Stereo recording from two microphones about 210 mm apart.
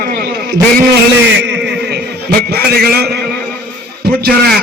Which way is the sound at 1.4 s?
55° right (ahead or behind).